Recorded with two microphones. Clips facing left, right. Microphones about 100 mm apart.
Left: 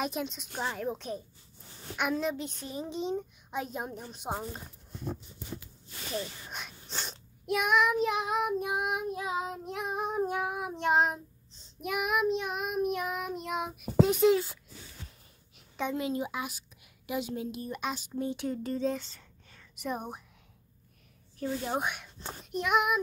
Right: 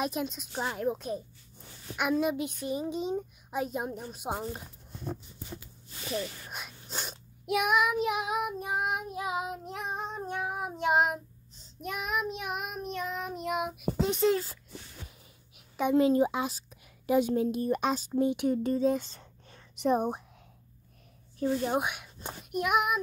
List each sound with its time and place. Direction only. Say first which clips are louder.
0.0 s child singing: right 2 dB; centre (ahead or behind)
2.0 s a child's voice: right 3 dB; 5° right (ahead or behind)
6.5 s child singing: right 1 dB; 5° right (ahead or behind)
12.8 s child singing: left 3 dB; 10° left (ahead or behind)
15.7 s a sound: right 6 dB; 10° right (ahead or behind)
16.0 s speech: right 8 dB; 35° right (ahead or behind)
17.7 s speech: right 6 dB; 35° right (ahead or behind)
18.2 s child singing: right 6 dB; 15° right (ahead or behind)
18.8 s a child's voice: right 4 dB; 15° right (ahead or behind)
19.1 s whispering: right 4 dB; 25° right (ahead or behind)
21.7 s speech: right 2 dB; 5° right (ahead or behind)
22.5 s child singing: even; 5° right (ahead or behind)